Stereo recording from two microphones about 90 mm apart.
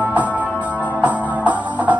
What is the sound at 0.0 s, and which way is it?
Music, 15° right (ahead or behind).